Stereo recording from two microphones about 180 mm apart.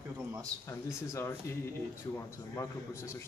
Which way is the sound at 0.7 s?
15° left (ahead or behind).